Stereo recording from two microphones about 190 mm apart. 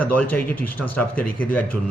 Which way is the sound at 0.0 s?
10° left (ahead or behind).